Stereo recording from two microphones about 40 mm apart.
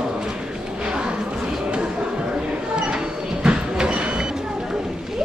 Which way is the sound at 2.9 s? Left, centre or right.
Right.